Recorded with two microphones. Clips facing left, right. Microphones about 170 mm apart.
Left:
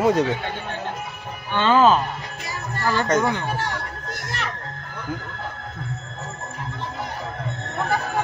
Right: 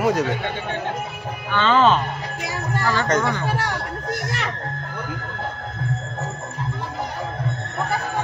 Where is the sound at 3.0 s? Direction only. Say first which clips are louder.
Left 3 dB; 15° left (ahead or behind).